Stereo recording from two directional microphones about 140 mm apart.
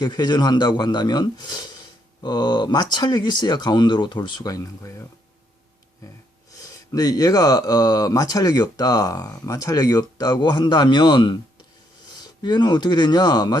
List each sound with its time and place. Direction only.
0.0 s speech: 30° left (ahead or behind)
6.6 s speech: 25° left (ahead or behind)